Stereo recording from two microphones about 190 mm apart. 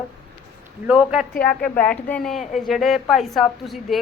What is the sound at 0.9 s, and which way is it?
Speech, 5° right (ahead or behind).